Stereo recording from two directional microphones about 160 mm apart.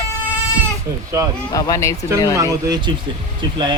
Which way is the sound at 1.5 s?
20° left (ahead or behind).